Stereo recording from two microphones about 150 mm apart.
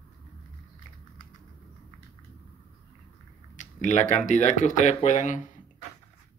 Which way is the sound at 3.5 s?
55° left (ahead or behind).